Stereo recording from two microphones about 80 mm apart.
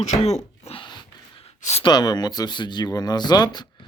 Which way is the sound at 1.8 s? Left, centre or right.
Left.